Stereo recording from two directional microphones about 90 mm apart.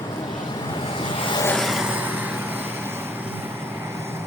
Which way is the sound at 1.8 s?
20° right (ahead or behind).